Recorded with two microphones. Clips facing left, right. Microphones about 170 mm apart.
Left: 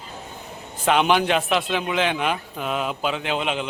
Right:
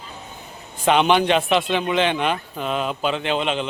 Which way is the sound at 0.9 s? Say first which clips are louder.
Right 2 dB; 5° left (ahead or behind).